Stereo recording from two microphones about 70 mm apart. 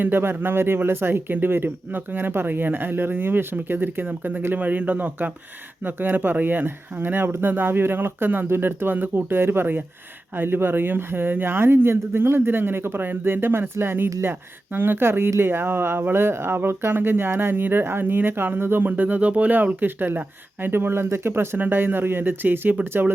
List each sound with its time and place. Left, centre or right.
0.0 s speech: right